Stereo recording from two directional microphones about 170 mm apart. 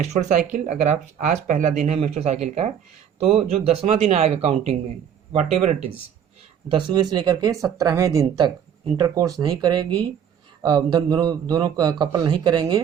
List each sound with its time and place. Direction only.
0.0 s speech: 45° right (ahead or behind)
6.7 s a man's voice: 30° right (ahead or behind)